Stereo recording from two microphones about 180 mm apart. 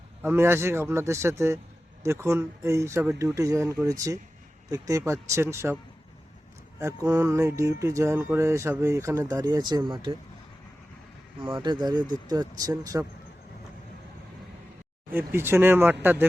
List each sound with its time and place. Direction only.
0.2 s speech: 15° right (ahead or behind)
6.7 s speech: 15° right (ahead or behind)
11.4 s speech: 25° right (ahead or behind)
15.1 s speech: 15° right (ahead or behind)